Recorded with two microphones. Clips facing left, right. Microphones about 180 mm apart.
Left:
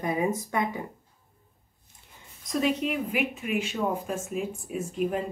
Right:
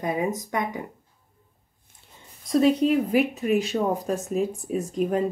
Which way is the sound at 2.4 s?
35° right (ahead or behind).